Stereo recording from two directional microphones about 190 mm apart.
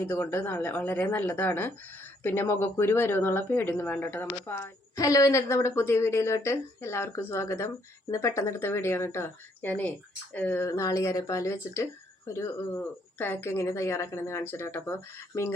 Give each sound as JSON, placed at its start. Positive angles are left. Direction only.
{"t": 0.0, "sound": "speech", "side_deg": 10}